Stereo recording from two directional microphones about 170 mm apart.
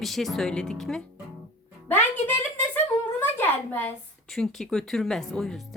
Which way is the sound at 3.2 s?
10° left (ahead or behind).